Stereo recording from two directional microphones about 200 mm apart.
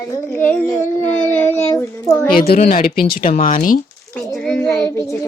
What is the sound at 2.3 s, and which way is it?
Speech, 50° left (ahead or behind).